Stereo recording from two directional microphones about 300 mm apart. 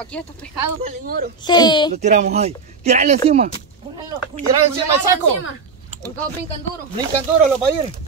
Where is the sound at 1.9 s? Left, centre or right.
Right.